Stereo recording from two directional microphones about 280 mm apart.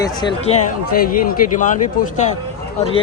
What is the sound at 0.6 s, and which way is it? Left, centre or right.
Speech, left.